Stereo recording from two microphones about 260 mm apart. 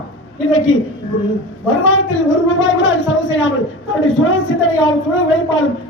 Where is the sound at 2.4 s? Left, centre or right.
Left.